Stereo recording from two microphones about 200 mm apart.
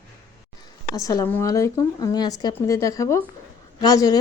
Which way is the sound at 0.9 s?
15° left (ahead or behind).